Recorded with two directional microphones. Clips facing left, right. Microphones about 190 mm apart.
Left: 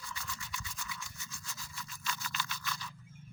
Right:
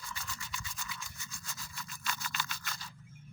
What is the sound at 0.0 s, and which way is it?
Rub, 45° right (ahead or behind).